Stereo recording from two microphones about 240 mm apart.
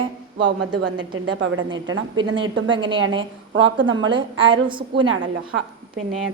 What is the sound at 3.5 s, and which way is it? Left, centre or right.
Speech, right.